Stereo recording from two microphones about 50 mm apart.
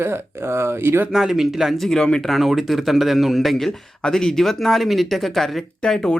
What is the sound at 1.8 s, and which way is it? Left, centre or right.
Speech, centre.